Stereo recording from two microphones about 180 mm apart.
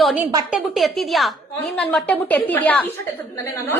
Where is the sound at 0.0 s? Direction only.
5° right (ahead or behind).